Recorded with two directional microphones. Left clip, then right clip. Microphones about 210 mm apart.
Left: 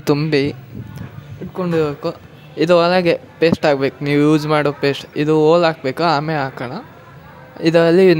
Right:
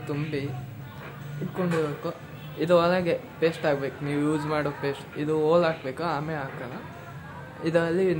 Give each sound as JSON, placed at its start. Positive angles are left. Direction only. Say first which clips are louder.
{"t": 0.0, "sound": "speech", "louder": "left 15 dB", "side_deg": 45}
{"t": 1.6, "sound": "speech", "louder": "left 9 dB", "side_deg": 40}